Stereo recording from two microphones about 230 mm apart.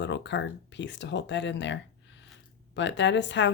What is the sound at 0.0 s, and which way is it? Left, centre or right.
Speech, left.